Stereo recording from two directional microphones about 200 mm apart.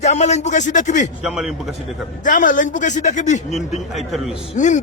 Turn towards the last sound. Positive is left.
turn(degrees=35)  # may be behind; listen again after turning